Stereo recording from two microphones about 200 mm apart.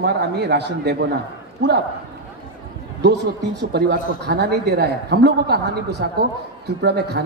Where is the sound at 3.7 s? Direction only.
55° right (ahead or behind).